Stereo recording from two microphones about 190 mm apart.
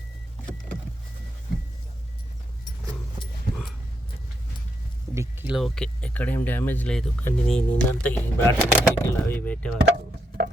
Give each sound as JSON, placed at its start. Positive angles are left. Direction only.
{"t": 5.1, "sound": "vehicle", "side_deg": -15}
{"t": 5.5, "sound": "speech", "side_deg": 0}
{"t": 9.9, "sound": "a sound", "side_deg": -55}